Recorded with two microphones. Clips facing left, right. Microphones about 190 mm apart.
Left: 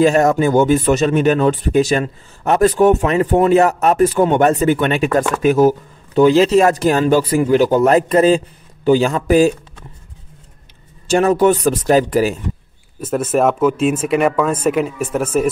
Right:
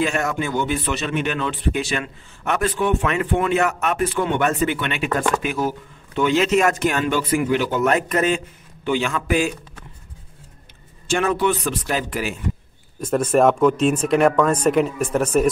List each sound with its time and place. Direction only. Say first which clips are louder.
0.0 s speech: left 10 dB; 40° left (ahead or behind)
11.1 s speech: left 7 dB; 40° left (ahead or behind)
13.0 s speech: left 1 dB; 5° left (ahead or behind)